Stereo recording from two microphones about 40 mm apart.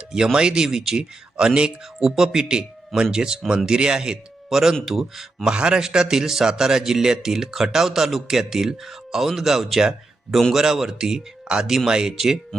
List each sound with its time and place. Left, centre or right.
0.3 s a man's voice: centre
2.0 s a man's voice: centre
5.4 s a man's voice: centre
12.1 s speech: centre